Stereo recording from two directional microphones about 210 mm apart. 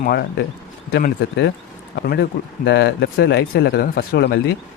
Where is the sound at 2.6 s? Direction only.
55° left (ahead or behind).